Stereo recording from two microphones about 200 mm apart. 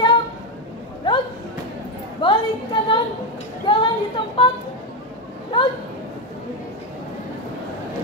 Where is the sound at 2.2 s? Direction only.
25° left (ahead or behind).